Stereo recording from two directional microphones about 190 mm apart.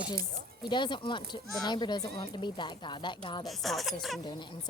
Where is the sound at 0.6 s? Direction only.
25° left (ahead or behind).